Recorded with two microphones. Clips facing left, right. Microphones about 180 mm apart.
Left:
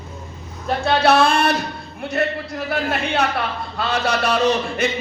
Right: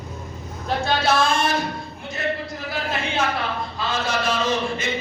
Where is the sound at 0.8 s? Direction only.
65° left (ahead or behind).